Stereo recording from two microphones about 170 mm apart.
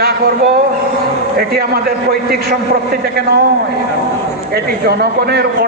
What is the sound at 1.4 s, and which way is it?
A man's voice, 65° right (ahead or behind).